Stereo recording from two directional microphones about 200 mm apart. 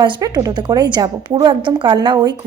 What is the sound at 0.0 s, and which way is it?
A woman's voice, 20° right (ahead or behind).